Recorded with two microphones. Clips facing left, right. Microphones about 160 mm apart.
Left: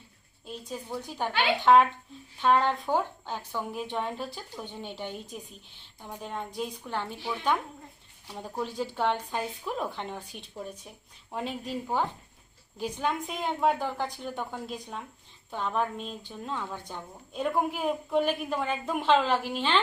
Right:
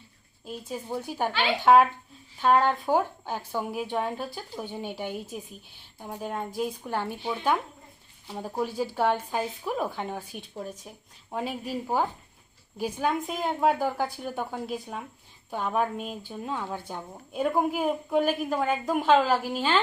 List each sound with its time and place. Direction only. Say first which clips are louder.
0.7 s a woman's voice: right 4 dB; 10° right (ahead or behind)
8.6 s a woman's voice: right 3 dB; 10° right (ahead or behind)